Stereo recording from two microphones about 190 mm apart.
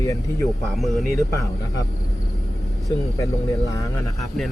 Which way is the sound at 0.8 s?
Centre (ahead or behind).